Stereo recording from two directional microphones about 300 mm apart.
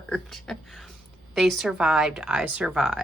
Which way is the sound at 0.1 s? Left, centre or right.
Centre.